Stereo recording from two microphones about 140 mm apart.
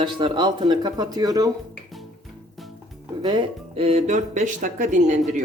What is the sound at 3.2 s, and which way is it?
Speech, 35° right (ahead or behind).